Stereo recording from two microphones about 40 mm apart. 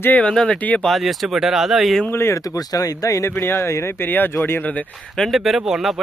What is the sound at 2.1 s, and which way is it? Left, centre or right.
Speech, left.